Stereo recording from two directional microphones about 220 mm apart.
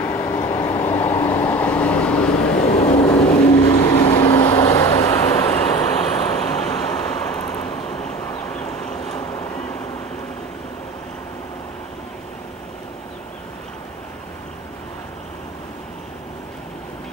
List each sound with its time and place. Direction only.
0.0 s vehicle: 15° left (ahead or behind)
2.5 s vehicle: 35° left (ahead or behind)
3.4 s vehicle: 15° left (ahead or behind)
9.3 s vehicle: 15° left (ahead or behind)